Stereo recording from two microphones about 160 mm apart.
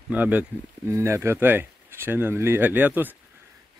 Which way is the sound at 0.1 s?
10° right (ahead or behind).